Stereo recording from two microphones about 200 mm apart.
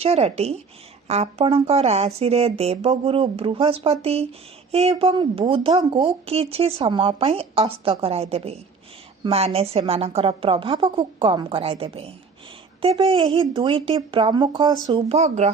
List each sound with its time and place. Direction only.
0.0 s speech: 30° right (ahead or behind)